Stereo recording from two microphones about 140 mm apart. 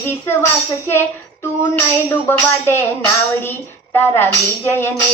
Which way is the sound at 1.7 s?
15° left (ahead or behind).